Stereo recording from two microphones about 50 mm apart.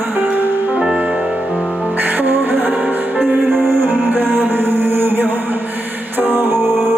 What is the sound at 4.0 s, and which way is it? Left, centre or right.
Music, right.